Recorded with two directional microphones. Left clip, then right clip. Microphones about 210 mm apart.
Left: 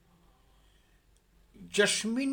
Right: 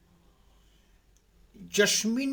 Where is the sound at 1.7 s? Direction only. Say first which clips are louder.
Right 2 dB; 5° right (ahead or behind).